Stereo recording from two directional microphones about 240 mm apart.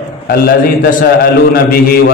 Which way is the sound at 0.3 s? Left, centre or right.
Left.